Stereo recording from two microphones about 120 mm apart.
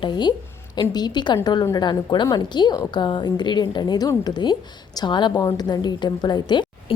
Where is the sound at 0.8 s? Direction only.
40° left (ahead or behind).